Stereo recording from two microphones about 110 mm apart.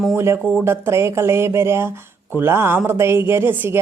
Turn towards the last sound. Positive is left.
turn(degrees=-15)  # may be behind; listen again after turning